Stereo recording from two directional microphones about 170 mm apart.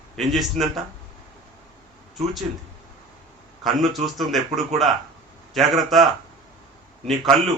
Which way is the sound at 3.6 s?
Centre (ahead or behind).